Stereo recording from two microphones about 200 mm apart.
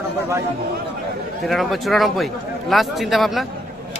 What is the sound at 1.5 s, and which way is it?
A man's voice, centre (ahead or behind).